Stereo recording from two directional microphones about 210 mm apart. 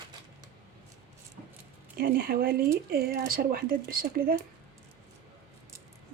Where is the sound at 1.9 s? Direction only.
45° right (ahead or behind).